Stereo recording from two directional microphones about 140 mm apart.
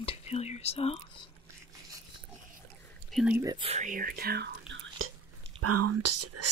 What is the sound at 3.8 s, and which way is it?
Speech, 85° right.